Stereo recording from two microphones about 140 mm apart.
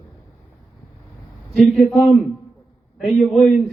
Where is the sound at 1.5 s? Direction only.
Centre (ahead or behind).